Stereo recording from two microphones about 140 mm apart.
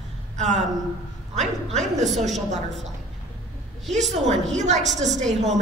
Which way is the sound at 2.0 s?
Centre (ahead or behind).